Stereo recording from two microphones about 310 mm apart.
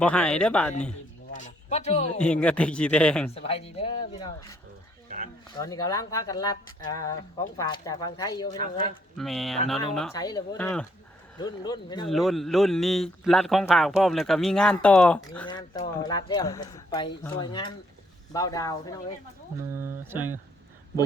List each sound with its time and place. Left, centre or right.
0.0 s a man's voice: centre
1.3 s a man's voice: left
2.2 s a man's voice: centre
3.3 s speech: centre
5.5 s speech: centre
9.1 s a man's voice: centre
10.2 s speech: centre
12.0 s a man's voice: centre
19.8 s speech: centre